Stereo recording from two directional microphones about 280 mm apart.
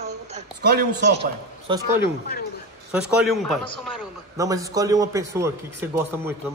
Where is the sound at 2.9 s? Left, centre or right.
Centre.